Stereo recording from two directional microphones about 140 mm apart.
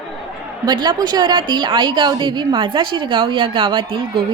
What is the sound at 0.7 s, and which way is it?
A woman's voice, 30° right (ahead or behind).